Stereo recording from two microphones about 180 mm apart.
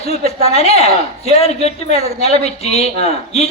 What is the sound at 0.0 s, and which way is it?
A man's voice, 35° left (ahead or behind).